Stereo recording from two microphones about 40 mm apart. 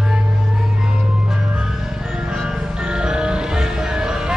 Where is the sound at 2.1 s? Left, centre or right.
Centre.